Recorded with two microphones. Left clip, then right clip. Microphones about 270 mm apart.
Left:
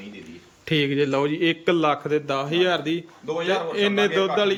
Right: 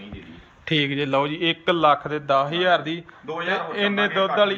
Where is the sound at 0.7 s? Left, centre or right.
Centre.